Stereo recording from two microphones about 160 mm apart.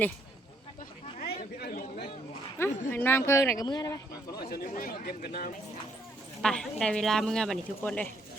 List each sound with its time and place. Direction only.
1.2 s chatter: 75° left (ahead or behind)
2.6 s speech: 15° left (ahead or behind)
4.5 s speech: 65° left (ahead or behind)
6.4 s speech: 5° left (ahead or behind)